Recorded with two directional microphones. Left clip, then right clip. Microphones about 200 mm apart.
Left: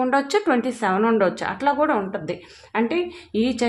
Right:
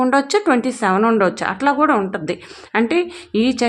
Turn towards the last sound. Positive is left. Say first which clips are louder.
# right 5 dB
turn(degrees=-30)  # may be behind; listen again after turning